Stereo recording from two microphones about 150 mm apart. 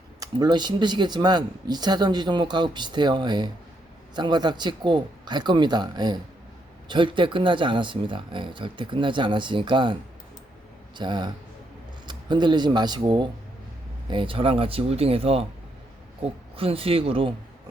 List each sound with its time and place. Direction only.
0.2 s speech: 30° right (ahead or behind)
10.9 s speech: 30° right (ahead or behind)